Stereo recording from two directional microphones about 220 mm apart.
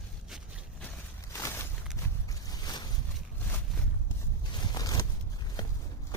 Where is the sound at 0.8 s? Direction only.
15° left (ahead or behind).